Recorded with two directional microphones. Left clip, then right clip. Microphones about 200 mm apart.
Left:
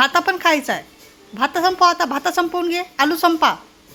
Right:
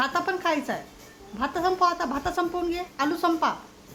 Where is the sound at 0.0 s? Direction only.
30° left (ahead or behind).